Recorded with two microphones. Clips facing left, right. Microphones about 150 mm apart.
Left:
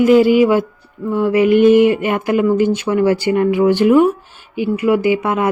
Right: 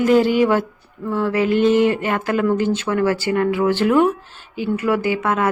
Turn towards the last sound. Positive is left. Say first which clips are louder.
# left 4 dB
turn(degrees=15)  # may be behind; listen again after turning